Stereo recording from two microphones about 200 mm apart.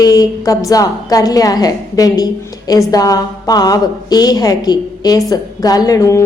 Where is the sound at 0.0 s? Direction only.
20° left (ahead or behind).